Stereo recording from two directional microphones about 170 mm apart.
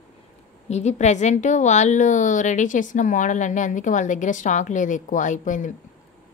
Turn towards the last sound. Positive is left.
turn(degrees=50)  # may be behind; listen again after turning